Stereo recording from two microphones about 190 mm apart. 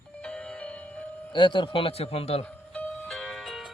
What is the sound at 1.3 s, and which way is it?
A man's voice, 25° left (ahead or behind).